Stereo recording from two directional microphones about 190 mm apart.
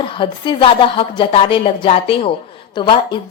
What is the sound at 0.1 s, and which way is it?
A woman's voice, 25° left (ahead or behind).